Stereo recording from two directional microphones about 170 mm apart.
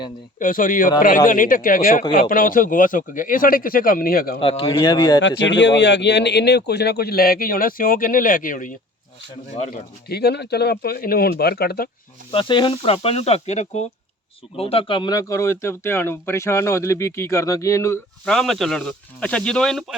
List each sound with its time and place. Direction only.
0.3 s a man's voice: 55° left (ahead or behind)
4.4 s speech: 30° left (ahead or behind)
5.5 s speech: 90° left; by 8.7 s 50° left (ahead or behind)
10.1 s speech: 70° left (ahead or behind)
12.3 s speech: 30° left (ahead or behind)
18.3 s speech: centre (ahead or behind)